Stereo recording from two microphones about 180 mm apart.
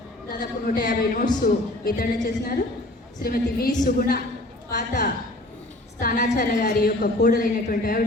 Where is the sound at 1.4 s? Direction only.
55° left (ahead or behind).